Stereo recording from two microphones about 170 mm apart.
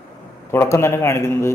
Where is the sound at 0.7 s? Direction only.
15° left (ahead or behind).